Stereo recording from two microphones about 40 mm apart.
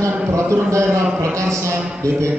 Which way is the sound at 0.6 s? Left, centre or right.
Right.